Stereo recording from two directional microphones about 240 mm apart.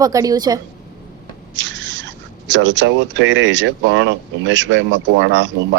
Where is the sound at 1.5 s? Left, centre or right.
Right.